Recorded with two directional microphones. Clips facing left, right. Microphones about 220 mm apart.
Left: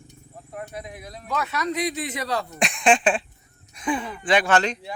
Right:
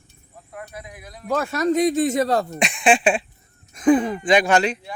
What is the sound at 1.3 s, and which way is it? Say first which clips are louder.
Speech: right 7 dB; 45° right (ahead or behind).